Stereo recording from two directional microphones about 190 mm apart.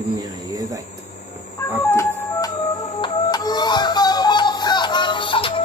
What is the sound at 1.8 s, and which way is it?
Music, 15° left (ahead or behind).